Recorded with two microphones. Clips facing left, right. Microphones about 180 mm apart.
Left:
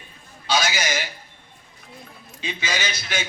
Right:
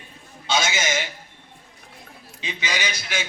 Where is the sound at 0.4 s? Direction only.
25° right (ahead or behind).